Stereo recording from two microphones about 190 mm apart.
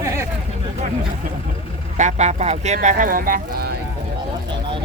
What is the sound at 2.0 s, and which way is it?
Speech, 40° right (ahead or behind).